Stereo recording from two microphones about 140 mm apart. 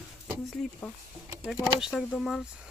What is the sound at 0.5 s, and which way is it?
Speech, 5° left (ahead or behind).